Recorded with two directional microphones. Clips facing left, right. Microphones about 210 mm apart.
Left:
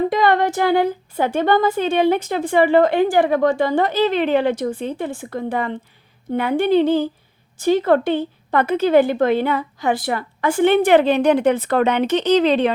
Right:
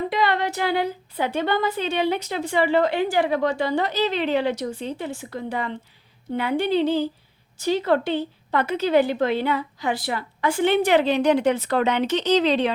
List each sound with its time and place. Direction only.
0.1 s a woman's voice: 50° left (ahead or behind)